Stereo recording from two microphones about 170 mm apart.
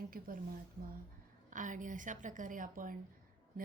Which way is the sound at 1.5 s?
50° right (ahead or behind).